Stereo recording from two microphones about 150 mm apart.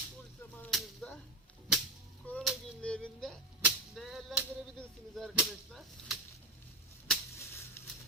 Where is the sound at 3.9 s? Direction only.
Centre (ahead or behind).